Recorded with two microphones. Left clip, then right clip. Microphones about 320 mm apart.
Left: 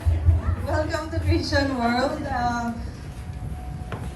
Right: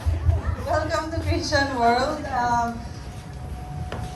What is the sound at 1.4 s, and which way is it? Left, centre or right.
Speech, centre.